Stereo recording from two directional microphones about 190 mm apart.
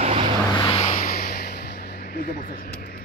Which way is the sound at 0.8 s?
45° left (ahead or behind).